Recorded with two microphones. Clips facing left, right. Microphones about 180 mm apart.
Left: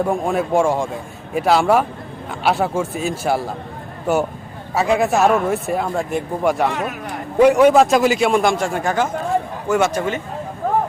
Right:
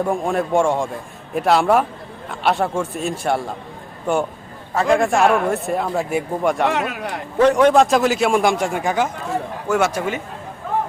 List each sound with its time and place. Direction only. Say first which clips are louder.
0.0 s speech: left 1 dB; centre (ahead or behind)
6.7 s speech: right 2 dB; 80° right
7.3 s speech: left 2 dB; 10° left (ahead or behind)
8.4 s a man's voice: even; 15° right (ahead or behind)
10.6 s a sound: left 5 dB; 45° left (ahead or behind)